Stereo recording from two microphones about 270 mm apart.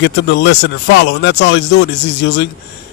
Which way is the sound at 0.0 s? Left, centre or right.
Left.